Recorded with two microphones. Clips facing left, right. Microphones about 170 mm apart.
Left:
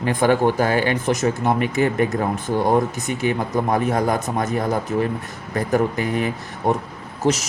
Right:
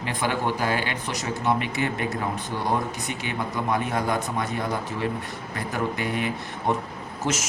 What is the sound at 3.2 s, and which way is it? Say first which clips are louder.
Speech: left 10 dB; 40° left (ahead or behind).